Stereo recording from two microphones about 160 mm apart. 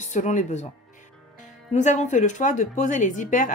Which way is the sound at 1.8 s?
50° left (ahead or behind).